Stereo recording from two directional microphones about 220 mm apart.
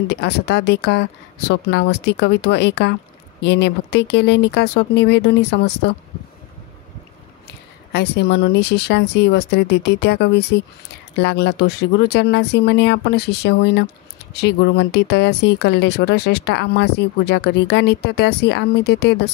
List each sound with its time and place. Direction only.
0.1 s speech: 50° left (ahead or behind)
7.4 s speech: 50° left (ahead or behind)